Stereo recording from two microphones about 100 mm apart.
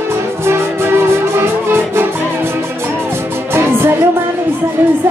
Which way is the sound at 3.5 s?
25° right (ahead or behind).